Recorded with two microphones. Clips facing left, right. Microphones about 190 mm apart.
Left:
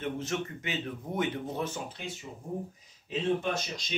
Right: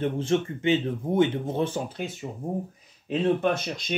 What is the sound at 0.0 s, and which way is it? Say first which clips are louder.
Speech: right 8 dB; 30° right (ahead or behind).